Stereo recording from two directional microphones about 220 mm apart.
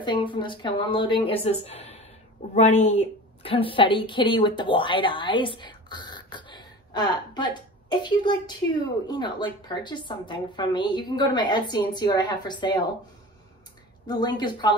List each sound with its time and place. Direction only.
0.0 s a woman's voice: 20° left (ahead or behind)
14.0 s a woman's voice: 20° left (ahead or behind)